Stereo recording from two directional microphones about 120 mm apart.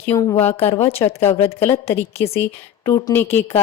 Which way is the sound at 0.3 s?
60° left (ahead or behind).